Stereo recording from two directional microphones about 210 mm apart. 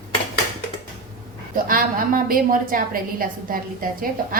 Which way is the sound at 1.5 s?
40° right (ahead or behind).